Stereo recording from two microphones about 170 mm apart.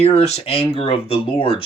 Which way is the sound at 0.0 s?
40° left (ahead or behind).